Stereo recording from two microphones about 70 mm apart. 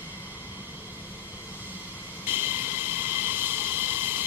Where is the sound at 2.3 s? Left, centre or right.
Right.